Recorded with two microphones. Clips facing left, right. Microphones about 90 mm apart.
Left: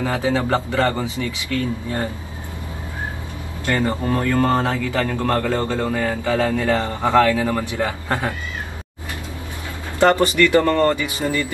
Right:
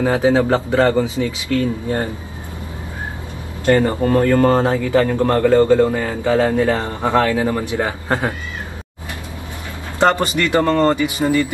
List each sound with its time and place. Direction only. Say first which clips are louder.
0.0 s a man's voice: right 6 dB; 20° right (ahead or behind)
1.6 s speech: right 3 dB; 35° right (ahead or behind)
4.1 s speech: right 6 dB; 40° right (ahead or behind)
4.6 s a man's voice: right 5 dB; 25° right (ahead or behind)
9.9 s a man's voice: left 1 dB; 20° right (ahead or behind)